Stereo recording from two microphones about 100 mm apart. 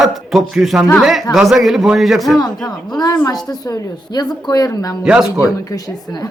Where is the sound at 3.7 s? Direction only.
45° left (ahead or behind).